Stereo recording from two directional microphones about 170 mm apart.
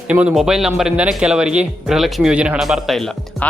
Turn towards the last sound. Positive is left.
turn(degrees=0)  # may be behind; listen again after turning